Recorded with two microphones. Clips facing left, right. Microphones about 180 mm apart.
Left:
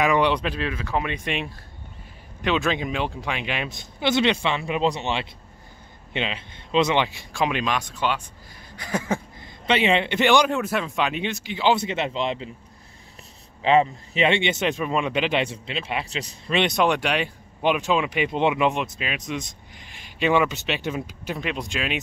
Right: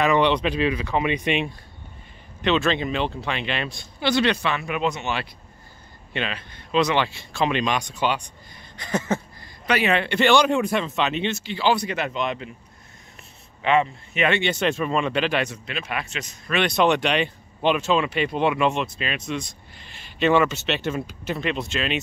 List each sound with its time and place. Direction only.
0.0 s speech: 10° left (ahead or behind)
7.2 s speech: 10° left (ahead or behind)
9.4 s a man's voice: 25° left (ahead or behind)
10.5 s speech: 5° left (ahead or behind); by 12.4 s 25° left (ahead or behind)
13.6 s speech: 30° left (ahead or behind)
16.7 s speech: 10° left (ahead or behind)